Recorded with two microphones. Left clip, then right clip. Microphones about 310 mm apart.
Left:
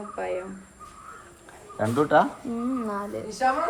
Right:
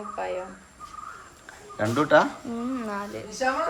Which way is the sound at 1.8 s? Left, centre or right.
Centre.